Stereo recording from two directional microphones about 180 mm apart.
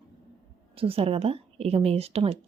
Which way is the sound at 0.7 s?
30° right (ahead or behind).